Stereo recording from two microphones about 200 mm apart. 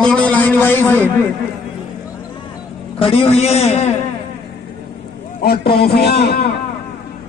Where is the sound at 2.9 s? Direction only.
30° left (ahead or behind).